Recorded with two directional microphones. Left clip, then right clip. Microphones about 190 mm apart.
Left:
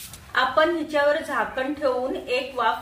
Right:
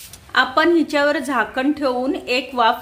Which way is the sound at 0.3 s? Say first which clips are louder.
Right 5 dB; 70° right (ahead or behind).